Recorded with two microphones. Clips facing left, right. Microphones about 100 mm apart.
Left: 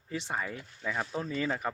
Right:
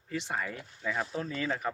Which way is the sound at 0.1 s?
20° left (ahead or behind).